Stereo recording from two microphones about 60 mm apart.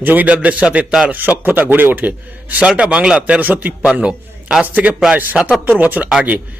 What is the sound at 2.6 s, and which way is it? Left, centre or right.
A man's voice, centre.